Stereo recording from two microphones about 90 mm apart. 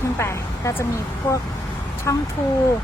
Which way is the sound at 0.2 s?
30° left (ahead or behind).